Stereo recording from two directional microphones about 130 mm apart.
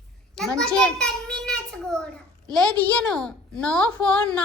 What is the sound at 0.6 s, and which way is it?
A child's voice, 5° left (ahead or behind).